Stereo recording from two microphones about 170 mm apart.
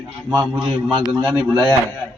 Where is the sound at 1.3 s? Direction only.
Centre (ahead or behind).